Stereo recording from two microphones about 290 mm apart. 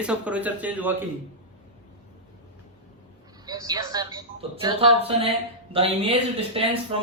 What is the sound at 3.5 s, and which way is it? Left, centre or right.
Speech, centre.